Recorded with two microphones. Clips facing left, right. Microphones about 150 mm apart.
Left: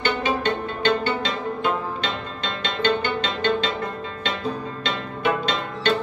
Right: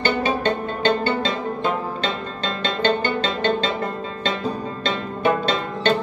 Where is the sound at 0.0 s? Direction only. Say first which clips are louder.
Right 2 dB; 35° right (ahead or behind).